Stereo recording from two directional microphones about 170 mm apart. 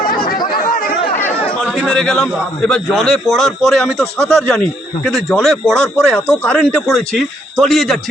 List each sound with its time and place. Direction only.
0.5 s chatter: 60° left (ahead or behind)
1.1 s chatter: 10° left (ahead or behind)
1.8 s a man's voice: 5° left (ahead or behind)